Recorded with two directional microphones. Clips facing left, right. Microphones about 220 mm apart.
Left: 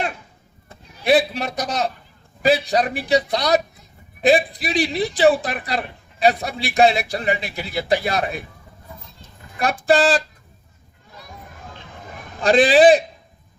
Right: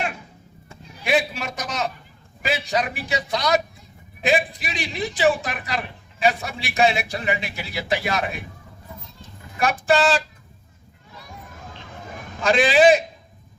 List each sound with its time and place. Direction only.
0.7 s a man's voice: 35° left (ahead or behind)
9.6 s a man's voice: 35° left (ahead or behind)
12.4 s a man's voice: 35° left (ahead or behind)